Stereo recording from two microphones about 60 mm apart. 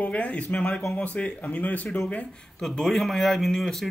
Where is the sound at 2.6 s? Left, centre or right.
Centre.